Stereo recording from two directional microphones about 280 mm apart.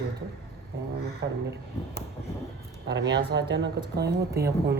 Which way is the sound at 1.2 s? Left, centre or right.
Right.